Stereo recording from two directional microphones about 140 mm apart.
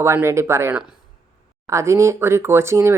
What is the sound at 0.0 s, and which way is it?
Speech, 20° right (ahead or behind).